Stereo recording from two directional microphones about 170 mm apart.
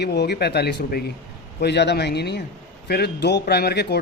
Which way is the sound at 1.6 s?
85° left.